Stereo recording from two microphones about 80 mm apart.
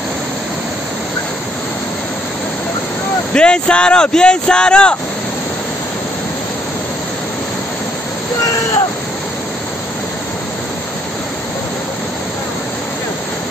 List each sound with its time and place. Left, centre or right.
3.3 s speech: centre